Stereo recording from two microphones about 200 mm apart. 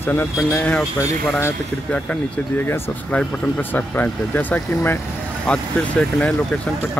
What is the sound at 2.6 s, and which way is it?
Speech, 10° left (ahead or behind).